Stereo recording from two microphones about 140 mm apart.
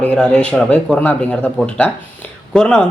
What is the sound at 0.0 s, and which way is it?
A man's voice, 5° left (ahead or behind).